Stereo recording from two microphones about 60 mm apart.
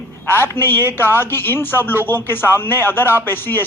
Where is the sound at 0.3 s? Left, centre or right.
Left.